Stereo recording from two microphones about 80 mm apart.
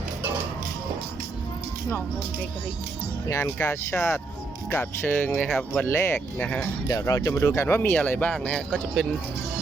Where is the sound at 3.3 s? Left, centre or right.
Left.